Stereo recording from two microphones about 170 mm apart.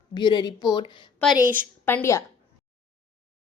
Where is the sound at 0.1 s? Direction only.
25° left (ahead or behind).